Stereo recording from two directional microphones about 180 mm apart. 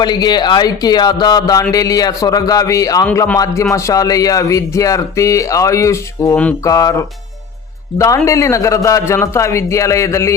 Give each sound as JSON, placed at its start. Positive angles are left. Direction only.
{"t": 0.0, "sound": "speech", "side_deg": 25}